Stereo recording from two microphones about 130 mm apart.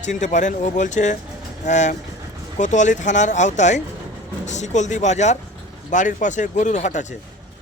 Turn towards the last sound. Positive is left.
turn(degrees=65)  # may be behind; listen again after turning